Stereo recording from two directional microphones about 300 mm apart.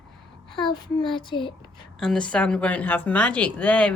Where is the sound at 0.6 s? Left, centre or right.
Centre.